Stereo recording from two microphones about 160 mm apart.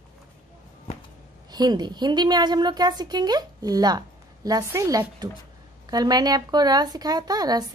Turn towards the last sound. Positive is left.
turn(degrees=-25)  # may be behind; listen again after turning